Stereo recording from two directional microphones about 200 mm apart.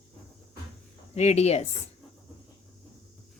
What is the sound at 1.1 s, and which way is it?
Speech, 35° left (ahead or behind).